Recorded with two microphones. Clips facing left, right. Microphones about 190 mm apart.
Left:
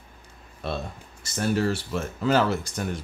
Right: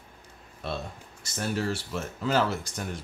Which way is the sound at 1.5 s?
65° left (ahead or behind).